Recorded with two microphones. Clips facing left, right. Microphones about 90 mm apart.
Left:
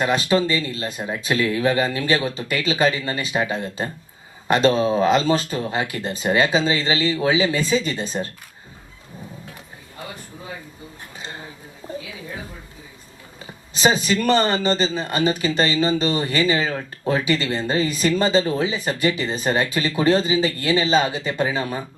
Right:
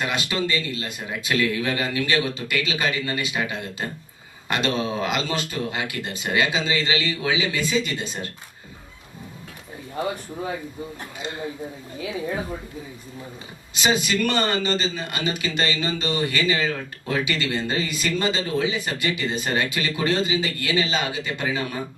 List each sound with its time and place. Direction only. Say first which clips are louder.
0.0 s speech: left 6 dB; 35° left (ahead or behind)
13.7 s speech: left 3 dB; 35° left (ahead or behind)